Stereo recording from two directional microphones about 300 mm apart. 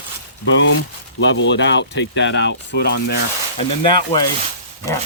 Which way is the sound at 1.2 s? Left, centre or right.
Left.